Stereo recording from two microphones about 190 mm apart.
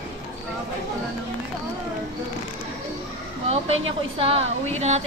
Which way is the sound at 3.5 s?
30° right (ahead or behind).